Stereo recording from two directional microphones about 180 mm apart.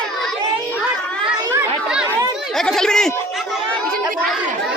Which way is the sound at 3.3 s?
Centre (ahead or behind).